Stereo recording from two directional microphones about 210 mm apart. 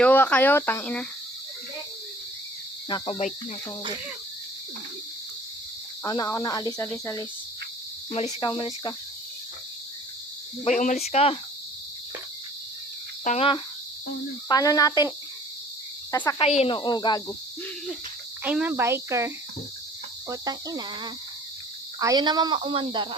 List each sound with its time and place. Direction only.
0.0 s speech: 5° left (ahead or behind)
2.9 s speech: 30° left (ahead or behind)
6.0 s speech: 15° left (ahead or behind)
8.1 s speech: 30° left (ahead or behind)
10.7 s speech: 35° left (ahead or behind)
13.2 s speech: 30° left (ahead or behind)
14.4 s speech: 15° left (ahead or behind)
16.4 s speech: 30° left (ahead or behind)
18.4 s speech: 10° right (ahead or behind)